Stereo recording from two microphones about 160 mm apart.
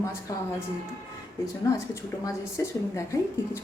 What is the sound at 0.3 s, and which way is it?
Speech, 20° left (ahead or behind).